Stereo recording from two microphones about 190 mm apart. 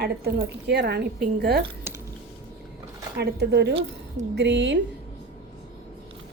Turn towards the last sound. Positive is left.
turn(degrees=-65)  # may be behind; listen again after turning